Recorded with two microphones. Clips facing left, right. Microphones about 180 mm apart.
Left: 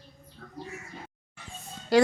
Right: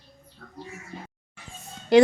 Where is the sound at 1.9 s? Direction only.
20° right (ahead or behind).